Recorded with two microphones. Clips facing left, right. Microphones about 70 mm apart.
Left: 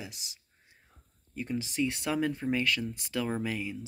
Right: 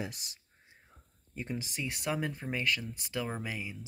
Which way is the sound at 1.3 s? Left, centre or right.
Right.